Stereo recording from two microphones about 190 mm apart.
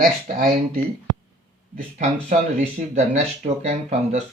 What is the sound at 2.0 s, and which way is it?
Speech, 35° right (ahead or behind).